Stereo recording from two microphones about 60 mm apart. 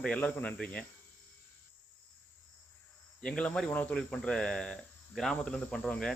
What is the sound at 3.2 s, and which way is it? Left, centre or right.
Cricket, centre.